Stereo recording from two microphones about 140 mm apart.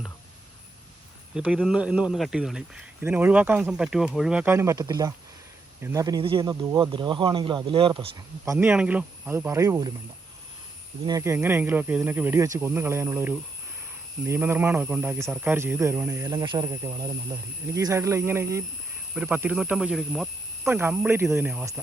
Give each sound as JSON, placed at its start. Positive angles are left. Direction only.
{"t": 1.5, "sound": "speech", "side_deg": -5}
{"t": 4.5, "sound": "speech", "side_deg": -20}
{"t": 8.5, "sound": "speech", "side_deg": -10}
{"t": 11.2, "sound": "speech", "side_deg": -20}
{"t": 20.7, "sound": "speech", "side_deg": -15}